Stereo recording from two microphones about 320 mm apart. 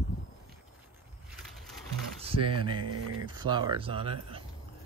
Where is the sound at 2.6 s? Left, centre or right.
Centre.